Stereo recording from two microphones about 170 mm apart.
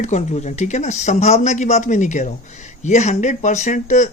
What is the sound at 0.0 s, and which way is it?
Speech, 40° left (ahead or behind).